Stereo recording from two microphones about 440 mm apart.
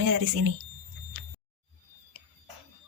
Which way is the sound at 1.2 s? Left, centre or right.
Right.